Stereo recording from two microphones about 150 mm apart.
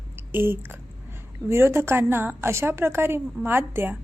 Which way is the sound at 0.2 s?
15° right (ahead or behind).